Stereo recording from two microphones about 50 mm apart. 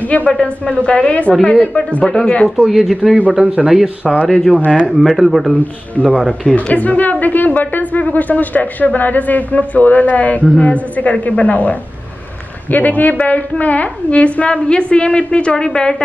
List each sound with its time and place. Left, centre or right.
0.3 s a woman's voice: centre
1.4 s speech: centre
1.8 s a woman's voice: left
2.0 s speech: centre
2.4 s speech: centre
3.2 s speech: right
4.9 s speech: centre
6.0 s a woman's voice: left
12.7 s a woman's voice: left; by 16.0 s centre